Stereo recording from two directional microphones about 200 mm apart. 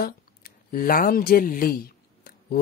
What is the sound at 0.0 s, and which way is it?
Speech, 45° left (ahead or behind).